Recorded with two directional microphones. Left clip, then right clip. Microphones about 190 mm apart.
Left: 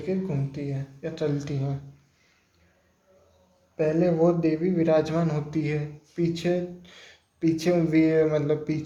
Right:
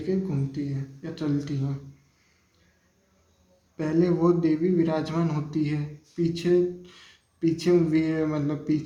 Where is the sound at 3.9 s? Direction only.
15° left (ahead or behind).